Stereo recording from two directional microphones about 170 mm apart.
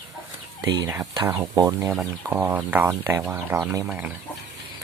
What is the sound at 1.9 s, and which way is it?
Speech, 10° right (ahead or behind).